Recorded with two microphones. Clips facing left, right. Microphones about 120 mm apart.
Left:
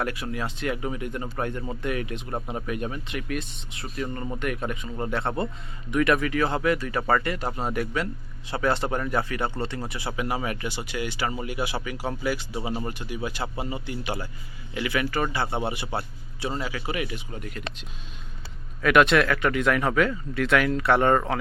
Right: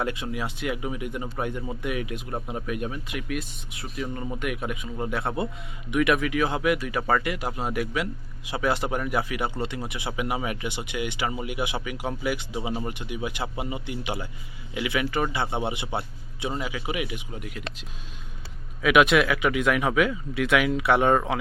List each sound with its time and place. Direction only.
0.0 s speech: 20° right (ahead or behind)